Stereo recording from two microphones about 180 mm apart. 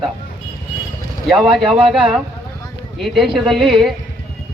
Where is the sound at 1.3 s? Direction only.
Centre (ahead or behind).